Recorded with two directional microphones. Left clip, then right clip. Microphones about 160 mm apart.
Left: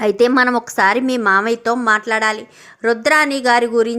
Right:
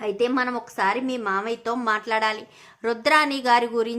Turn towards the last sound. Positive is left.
turn(degrees=30)  # may be behind; listen again after turning